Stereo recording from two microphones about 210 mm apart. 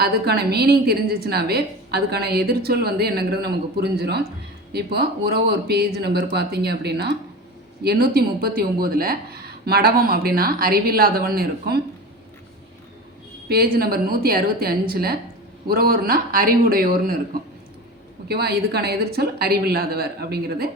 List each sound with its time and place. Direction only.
0.0 s a woman's voice: 50° right (ahead or behind)
13.5 s a woman's voice: 45° right (ahead or behind)
18.3 s a woman's voice: 50° right (ahead or behind)